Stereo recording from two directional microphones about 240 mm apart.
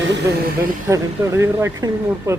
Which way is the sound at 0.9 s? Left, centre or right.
Centre.